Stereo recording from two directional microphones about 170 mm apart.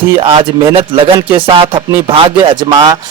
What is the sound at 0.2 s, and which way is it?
A man's voice, 30° right (ahead or behind).